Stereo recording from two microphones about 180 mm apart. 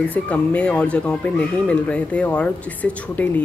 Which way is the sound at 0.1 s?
10° left (ahead or behind).